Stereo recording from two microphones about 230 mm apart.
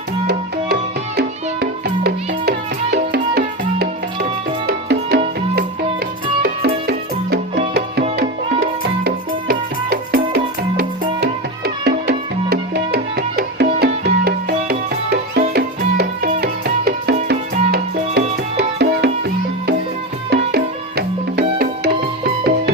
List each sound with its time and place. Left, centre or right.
0.3 s music: right
6.4 s music: right